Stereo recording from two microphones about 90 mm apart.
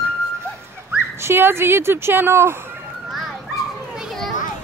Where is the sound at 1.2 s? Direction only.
25° right (ahead or behind).